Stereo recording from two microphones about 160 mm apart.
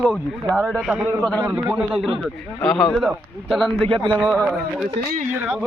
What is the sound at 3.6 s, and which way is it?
Speech, 30° right (ahead or behind).